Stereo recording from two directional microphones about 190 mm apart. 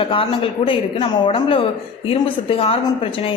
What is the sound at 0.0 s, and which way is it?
A woman's voice, 25° left (ahead or behind).